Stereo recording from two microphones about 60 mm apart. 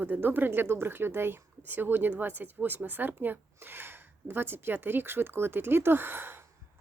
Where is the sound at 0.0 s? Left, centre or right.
Right.